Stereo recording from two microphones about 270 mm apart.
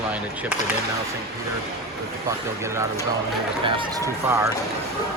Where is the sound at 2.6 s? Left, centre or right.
Centre.